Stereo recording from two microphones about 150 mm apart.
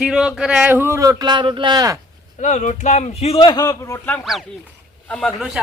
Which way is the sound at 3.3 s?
25° left (ahead or behind).